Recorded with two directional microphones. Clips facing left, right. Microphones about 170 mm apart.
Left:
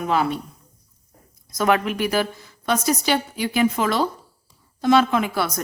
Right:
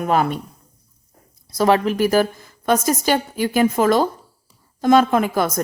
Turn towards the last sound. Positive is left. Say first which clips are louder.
# right 4 dB
turn(degrees=-45)  # may be behind; listen again after turning